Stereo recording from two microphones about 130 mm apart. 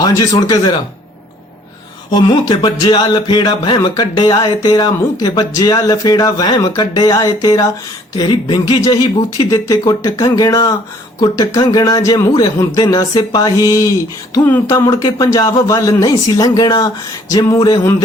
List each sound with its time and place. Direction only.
0.4 s speech: 35° left (ahead or behind)
2.0 s speech: 35° left (ahead or behind)